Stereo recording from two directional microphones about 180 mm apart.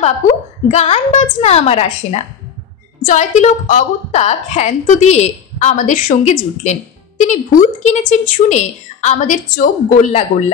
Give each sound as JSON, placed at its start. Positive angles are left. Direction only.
{"t": 0.7, "sound": "a woman's voice", "side_deg": 35}